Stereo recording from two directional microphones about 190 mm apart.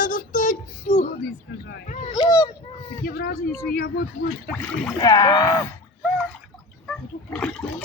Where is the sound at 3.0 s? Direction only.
55° left (ahead or behind).